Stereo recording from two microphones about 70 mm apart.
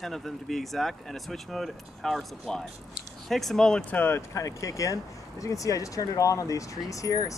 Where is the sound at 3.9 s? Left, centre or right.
Left.